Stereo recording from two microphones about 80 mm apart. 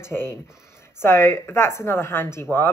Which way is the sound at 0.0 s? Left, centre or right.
Left.